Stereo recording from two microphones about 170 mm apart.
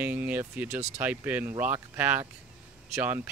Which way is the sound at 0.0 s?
10° right (ahead or behind).